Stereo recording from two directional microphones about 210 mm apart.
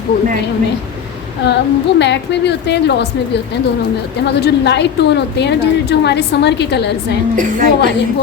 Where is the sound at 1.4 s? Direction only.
55° left (ahead or behind).